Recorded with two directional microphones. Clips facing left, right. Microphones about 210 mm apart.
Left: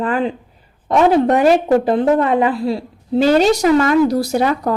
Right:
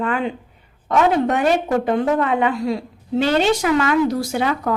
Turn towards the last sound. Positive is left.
turn(degrees=35)  # may be behind; listen again after turning